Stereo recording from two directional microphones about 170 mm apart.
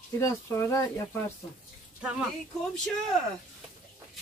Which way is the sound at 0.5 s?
15° left (ahead or behind).